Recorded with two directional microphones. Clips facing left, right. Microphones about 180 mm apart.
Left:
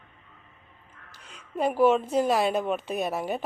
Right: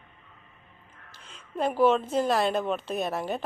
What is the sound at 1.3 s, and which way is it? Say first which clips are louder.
A woman's voice: left 1 dB; centre (ahead or behind).